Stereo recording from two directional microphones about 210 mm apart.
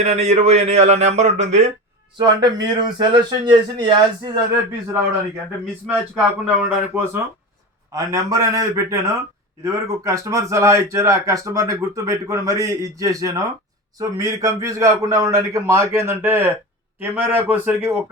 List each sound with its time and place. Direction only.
0.0 s speech: 30° right (ahead or behind)
2.1 s speech: 20° right (ahead or behind)
5.9 s speech: 5° right (ahead or behind)